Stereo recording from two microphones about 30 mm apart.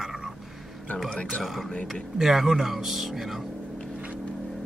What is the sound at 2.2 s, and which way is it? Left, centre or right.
Speech, centre.